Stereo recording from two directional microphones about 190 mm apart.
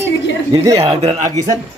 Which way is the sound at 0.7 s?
20° right (ahead or behind).